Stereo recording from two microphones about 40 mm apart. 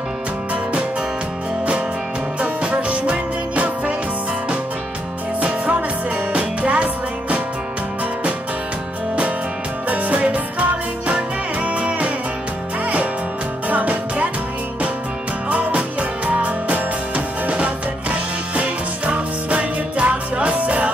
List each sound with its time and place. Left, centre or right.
2.4 s music: right
5.4 s music: right
9.8 s music: right
13.7 s music: right
15.5 s music: right